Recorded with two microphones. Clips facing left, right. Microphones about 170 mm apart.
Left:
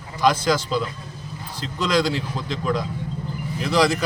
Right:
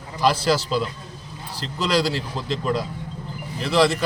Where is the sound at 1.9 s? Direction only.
35° right (ahead or behind).